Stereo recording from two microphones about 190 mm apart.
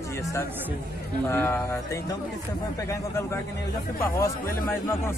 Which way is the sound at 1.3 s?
10° left (ahead or behind).